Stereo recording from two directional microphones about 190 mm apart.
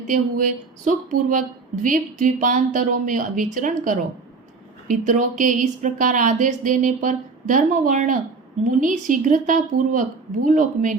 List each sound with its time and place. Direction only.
0.1 s a woman's voice: 45° right (ahead or behind)